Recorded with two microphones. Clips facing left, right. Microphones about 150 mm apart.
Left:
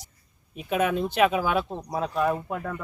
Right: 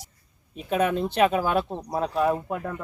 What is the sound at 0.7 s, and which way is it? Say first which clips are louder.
Speech: right 1 dB; 35° right (ahead or behind).